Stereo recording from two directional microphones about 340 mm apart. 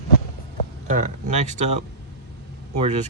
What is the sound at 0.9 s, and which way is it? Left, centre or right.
Speech, right.